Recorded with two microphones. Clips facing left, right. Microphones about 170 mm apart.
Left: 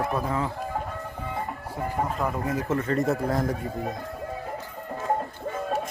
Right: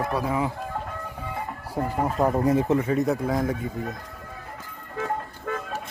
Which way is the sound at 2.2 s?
40° right (ahead or behind).